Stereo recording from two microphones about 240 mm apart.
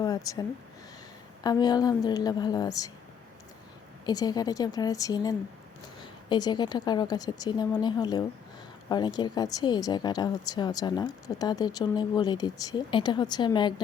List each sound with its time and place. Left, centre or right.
0.3 s speech: centre
1.5 s speech: centre
4.0 s speech: centre